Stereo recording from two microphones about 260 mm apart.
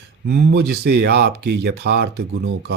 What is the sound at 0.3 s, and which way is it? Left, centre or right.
Speech, right.